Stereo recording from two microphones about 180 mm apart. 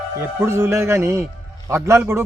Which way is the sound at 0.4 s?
15° right (ahead or behind).